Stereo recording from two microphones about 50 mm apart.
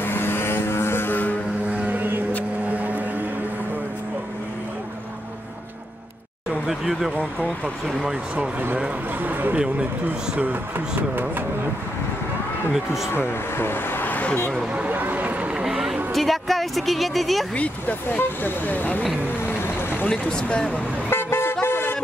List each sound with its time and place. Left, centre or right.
0.0 s vehicle: left
1.9 s vehicle: right
6.7 s a sound: centre
9.2 s speech: right
12.7 s speech: centre
13.1 s speech: left
14.9 s a sound: right
15.5 s a sound: centre
16.1 s speech: centre
17.6 s speech: left
19.2 s vehicle: left
20.1 s speech: centre
21.1 s vehicle: left
21.6 s music: left